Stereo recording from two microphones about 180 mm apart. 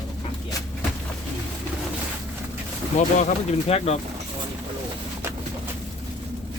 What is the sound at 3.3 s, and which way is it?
Speech, 35° left (ahead or behind).